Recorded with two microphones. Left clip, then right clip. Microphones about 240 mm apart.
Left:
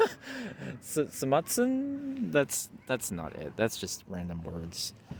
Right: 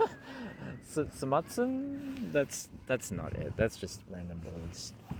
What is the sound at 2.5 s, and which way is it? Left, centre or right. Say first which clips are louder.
Speech: left 1 dB; centre.